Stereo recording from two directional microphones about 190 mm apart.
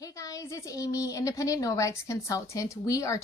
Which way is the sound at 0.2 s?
15° left (ahead or behind).